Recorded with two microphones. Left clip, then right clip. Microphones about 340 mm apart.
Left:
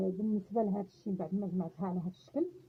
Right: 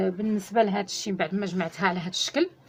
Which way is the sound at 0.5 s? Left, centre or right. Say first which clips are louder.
Right 13 dB; left.